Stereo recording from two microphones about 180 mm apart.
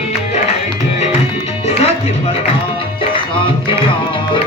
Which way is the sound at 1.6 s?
35° left (ahead or behind).